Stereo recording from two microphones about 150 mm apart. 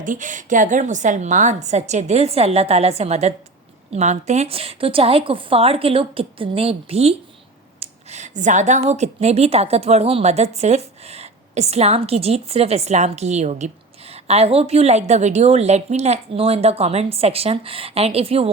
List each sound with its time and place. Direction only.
0.0 s a woman's voice: 60° right (ahead or behind); by 18.5 s 40° right (ahead or behind)